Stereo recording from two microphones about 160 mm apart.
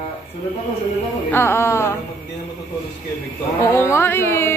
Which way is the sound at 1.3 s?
15° left (ahead or behind).